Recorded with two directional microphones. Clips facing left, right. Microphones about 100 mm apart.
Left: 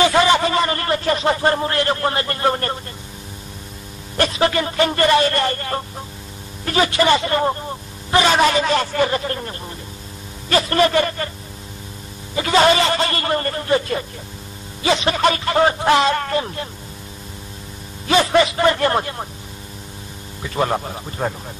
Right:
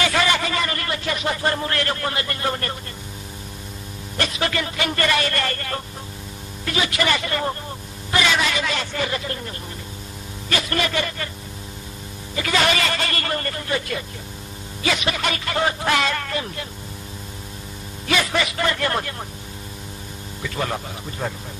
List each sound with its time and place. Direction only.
0.0 s a sound: 25° left (ahead or behind)
4.2 s speech: 30° left (ahead or behind)
6.6 s speech: 40° left (ahead or behind)
10.5 s speech: 35° left (ahead or behind)
12.4 s speech: 30° left (ahead or behind)
18.0 s speech: 30° left (ahead or behind)
20.4 s speech: 35° left (ahead or behind)